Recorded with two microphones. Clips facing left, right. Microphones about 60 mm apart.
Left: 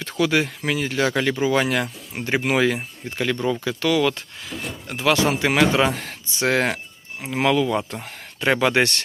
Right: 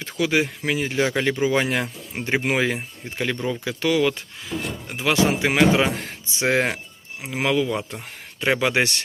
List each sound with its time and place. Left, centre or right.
0.0 s speech: centre
3.4 s speech: centre
3.7 s speech: right
4.5 s a sound: right
4.9 s speech: centre
5.4 s speech: centre